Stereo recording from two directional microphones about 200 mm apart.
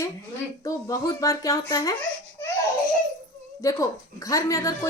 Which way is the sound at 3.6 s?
15° left (ahead or behind).